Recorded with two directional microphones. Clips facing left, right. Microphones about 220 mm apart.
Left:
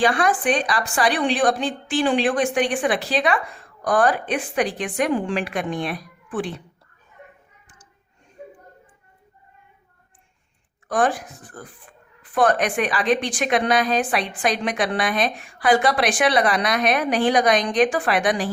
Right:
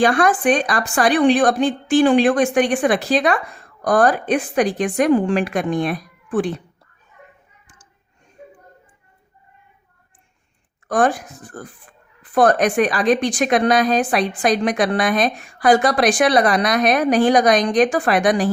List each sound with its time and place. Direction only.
0.0 s a woman's voice: 45° right (ahead or behind)
10.8 s a woman's voice: 45° right (ahead or behind)